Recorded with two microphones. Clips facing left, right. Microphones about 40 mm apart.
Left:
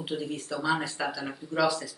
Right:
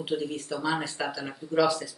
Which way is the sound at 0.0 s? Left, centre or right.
Centre.